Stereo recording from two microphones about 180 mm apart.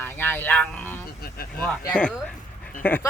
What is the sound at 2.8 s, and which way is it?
Speech, 10° left (ahead or behind).